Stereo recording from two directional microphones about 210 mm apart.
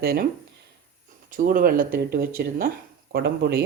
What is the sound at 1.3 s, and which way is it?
Speech, 40° right (ahead or behind).